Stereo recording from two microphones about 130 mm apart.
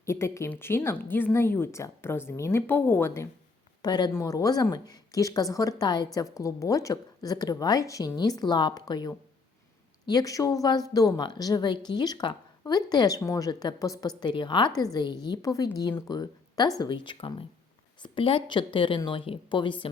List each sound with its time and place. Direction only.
0.0 s a woman's voice: 20° left (ahead or behind)
3.8 s a woman's voice: 35° left (ahead or behind)